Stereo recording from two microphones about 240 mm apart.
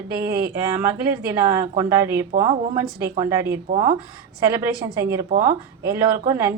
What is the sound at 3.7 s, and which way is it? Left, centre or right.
Speech, right.